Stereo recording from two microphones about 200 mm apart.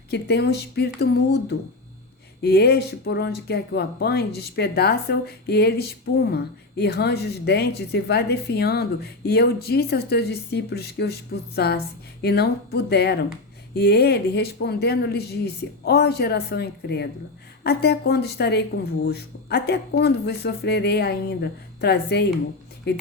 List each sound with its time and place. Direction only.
0.1 s speech: 55° left (ahead or behind)